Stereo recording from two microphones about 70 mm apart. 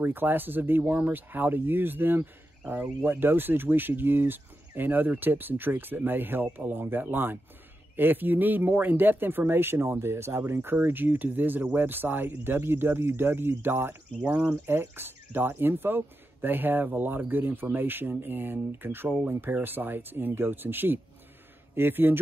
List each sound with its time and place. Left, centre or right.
0.0 s speech: right
14.3 s speech: centre
14.7 s speech: right